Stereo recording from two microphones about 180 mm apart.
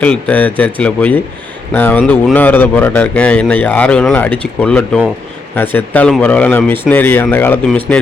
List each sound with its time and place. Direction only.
0.0 s speech: 10° left (ahead or behind)